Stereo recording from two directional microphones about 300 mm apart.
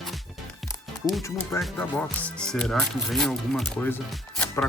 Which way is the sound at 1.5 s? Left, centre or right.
Centre.